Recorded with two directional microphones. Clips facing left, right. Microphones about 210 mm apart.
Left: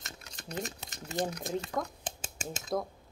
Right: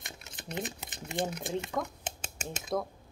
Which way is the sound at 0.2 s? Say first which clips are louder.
Right 1 dB; 25° right (ahead or behind).